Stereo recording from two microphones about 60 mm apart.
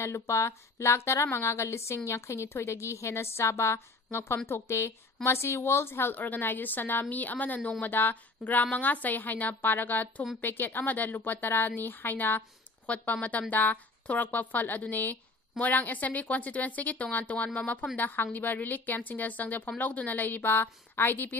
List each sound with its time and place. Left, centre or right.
0.0 s a woman's voice: left